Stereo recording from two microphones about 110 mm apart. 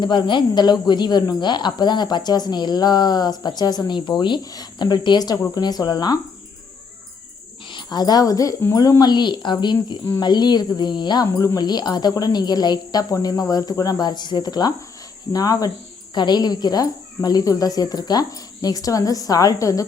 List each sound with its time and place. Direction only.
0.0 s a woman's voice: 45° left (ahead or behind)
7.7 s a woman's voice: 45° left (ahead or behind)